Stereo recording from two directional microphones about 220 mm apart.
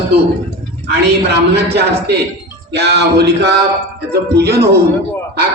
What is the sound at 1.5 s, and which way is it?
Speech, 50° right (ahead or behind).